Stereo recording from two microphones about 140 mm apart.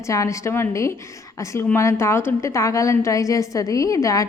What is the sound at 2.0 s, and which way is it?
A woman's voice, 20° left (ahead or behind).